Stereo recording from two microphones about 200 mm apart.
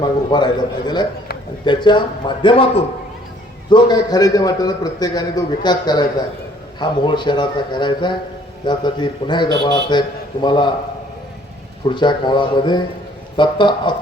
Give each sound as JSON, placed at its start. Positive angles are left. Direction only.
{"t": 0.0, "sound": "a man's voice", "side_deg": 20}
{"t": 11.9, "sound": "a man's voice", "side_deg": 20}